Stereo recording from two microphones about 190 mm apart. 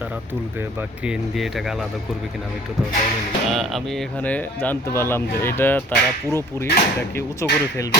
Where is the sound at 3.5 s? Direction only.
Centre (ahead or behind).